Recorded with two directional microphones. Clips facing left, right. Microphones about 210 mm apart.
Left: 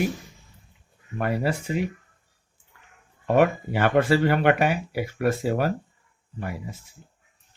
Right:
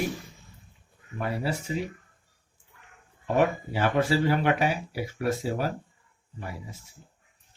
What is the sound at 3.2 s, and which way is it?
Speech, 65° left (ahead or behind).